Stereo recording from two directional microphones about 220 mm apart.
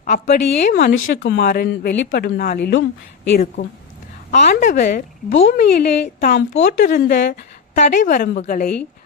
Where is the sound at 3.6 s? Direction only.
35° left (ahead or behind).